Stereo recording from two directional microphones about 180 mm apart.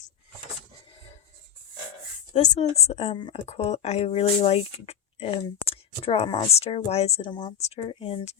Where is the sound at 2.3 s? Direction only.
40° left (ahead or behind).